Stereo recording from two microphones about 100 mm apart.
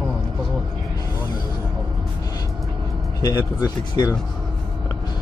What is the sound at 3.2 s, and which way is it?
Speech, 40° left (ahead or behind).